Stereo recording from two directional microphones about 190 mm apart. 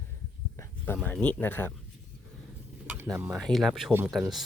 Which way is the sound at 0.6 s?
10° left (ahead or behind).